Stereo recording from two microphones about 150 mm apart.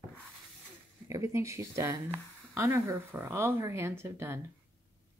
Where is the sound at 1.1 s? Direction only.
20° right (ahead or behind).